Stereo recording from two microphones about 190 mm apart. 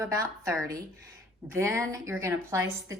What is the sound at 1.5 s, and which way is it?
A woman's voice, 15° right (ahead or behind).